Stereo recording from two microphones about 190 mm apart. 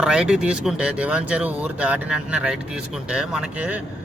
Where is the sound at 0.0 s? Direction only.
5° right (ahead or behind).